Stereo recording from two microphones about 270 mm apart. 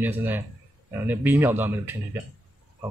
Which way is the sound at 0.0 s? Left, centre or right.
Centre.